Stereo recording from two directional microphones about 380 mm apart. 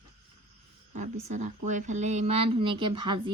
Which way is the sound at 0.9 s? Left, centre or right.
Centre.